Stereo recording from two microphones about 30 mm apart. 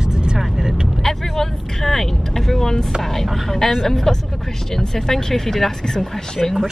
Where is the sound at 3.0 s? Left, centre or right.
Centre.